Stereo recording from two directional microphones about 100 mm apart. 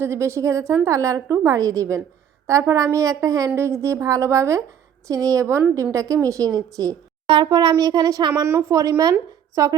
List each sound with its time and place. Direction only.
0.0 s a woman's voice: 30° right (ahead or behind)
7.3 s a woman's voice: 45° right (ahead or behind)